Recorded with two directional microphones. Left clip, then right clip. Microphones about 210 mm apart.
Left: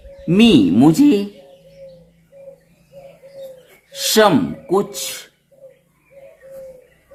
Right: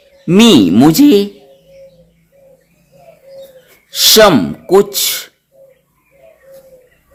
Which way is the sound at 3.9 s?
40° right (ahead or behind).